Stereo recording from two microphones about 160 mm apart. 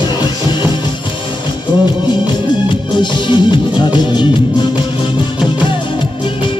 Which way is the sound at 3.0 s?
30° left (ahead or behind).